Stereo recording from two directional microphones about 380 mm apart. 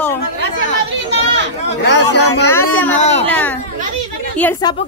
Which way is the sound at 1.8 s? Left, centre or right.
Left.